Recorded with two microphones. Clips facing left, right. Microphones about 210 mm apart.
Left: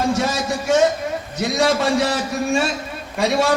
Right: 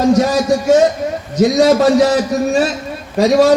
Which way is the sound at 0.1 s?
40° right (ahead or behind).